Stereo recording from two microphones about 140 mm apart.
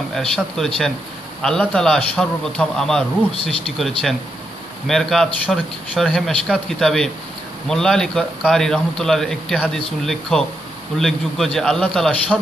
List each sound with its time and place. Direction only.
0.1 s a man's voice: 5° left (ahead or behind)